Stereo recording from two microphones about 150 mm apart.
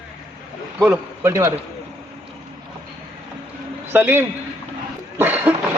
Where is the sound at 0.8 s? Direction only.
15° right (ahead or behind).